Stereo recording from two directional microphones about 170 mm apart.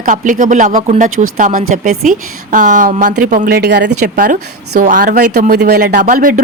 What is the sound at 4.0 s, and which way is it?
A woman's voice, 60° right (ahead or behind).